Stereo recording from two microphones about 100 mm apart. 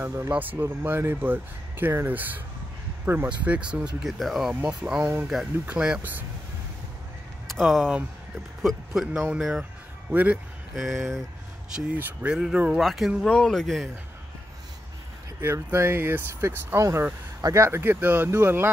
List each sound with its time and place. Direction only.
0.0 s speech: 25° right (ahead or behind)
7.5 s speech: centre (ahead or behind); by 10.4 s 15° right (ahead or behind)
10.7 s speech: 5° right (ahead or behind)
12.0 s speech: 15° right (ahead or behind); by 13.8 s 5° left (ahead or behind)
15.4 s speech: 25° right (ahead or behind)